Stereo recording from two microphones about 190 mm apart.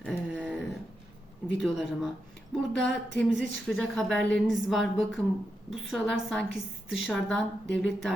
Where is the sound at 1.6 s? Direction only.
Centre (ahead or behind).